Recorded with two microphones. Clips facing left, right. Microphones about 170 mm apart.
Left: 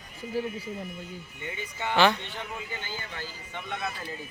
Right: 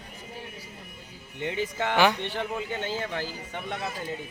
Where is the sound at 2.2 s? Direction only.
70° right (ahead or behind).